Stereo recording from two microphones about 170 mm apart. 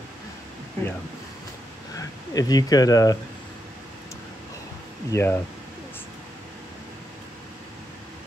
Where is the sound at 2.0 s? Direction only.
20° left (ahead or behind).